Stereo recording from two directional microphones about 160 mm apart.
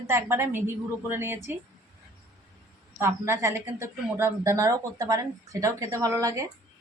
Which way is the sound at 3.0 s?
15° right (ahead or behind).